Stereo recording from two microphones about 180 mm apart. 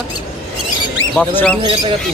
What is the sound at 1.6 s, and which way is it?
Speech, 30° right (ahead or behind).